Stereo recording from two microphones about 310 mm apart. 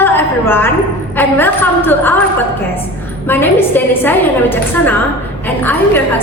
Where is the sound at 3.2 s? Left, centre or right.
Centre.